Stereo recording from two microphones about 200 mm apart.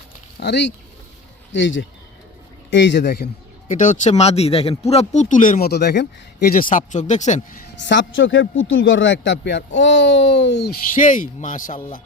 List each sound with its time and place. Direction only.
0.3 s a man's voice: 60° left (ahead or behind)
3.7 s speech: 40° left (ahead or behind)
7.8 s speech: 60° left (ahead or behind); by 12.0 s 40° left (ahead or behind)